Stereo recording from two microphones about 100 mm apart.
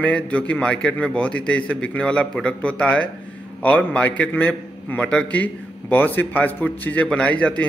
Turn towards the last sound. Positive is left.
turn(degrees=10)  # may be behind; listen again after turning